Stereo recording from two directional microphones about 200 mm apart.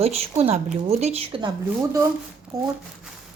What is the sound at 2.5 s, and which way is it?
Speech, 15° right (ahead or behind).